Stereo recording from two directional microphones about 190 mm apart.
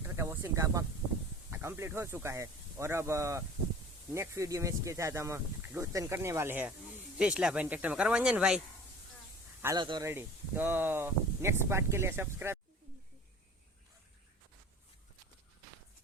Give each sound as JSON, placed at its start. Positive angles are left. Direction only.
{"t": 0.0, "sound": "snake", "side_deg": -10}
{"t": 1.5, "sound": "speech", "side_deg": -10}
{"t": 10.1, "sound": "speech", "side_deg": -10}